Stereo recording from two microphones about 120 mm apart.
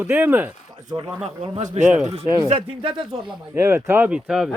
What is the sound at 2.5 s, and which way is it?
Speech, 50° right (ahead or behind).